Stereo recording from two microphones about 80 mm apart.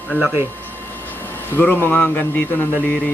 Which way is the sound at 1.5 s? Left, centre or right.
Left.